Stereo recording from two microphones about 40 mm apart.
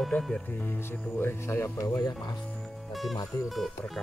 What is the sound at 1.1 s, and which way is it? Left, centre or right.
Speech, left.